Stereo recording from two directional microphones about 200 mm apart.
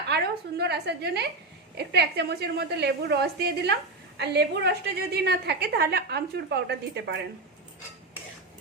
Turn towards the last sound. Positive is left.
turn(degrees=-55)  # may be behind; listen again after turning